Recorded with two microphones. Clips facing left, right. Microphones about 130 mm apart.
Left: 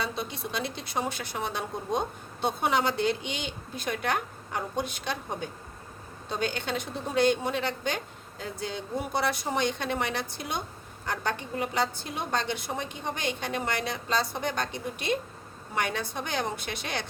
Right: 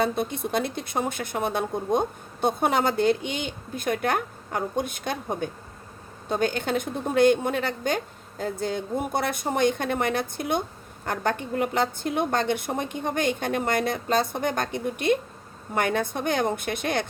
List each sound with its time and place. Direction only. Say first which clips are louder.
0.0 s speech: right 8 dB; 50° right (ahead or behind)